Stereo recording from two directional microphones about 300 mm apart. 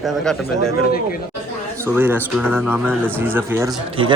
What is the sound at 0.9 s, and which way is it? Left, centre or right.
Speech, left.